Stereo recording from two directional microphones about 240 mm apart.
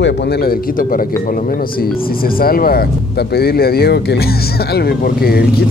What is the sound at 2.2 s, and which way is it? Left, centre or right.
Speech, left.